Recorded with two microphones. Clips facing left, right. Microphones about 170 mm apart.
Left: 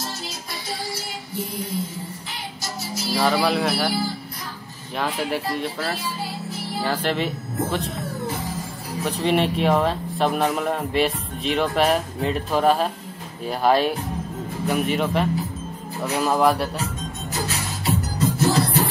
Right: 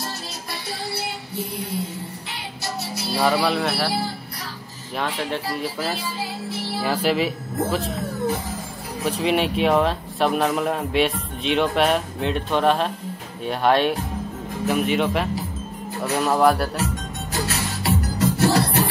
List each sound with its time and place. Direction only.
0.7 s music: 65° right (ahead or behind)
2.6 s music: 65° right (ahead or behind)
3.2 s speech: centre (ahead or behind)
4.9 s speech: centre (ahead or behind)
9.0 s speech: centre (ahead or behind)
17.3 s music: 65° right (ahead or behind)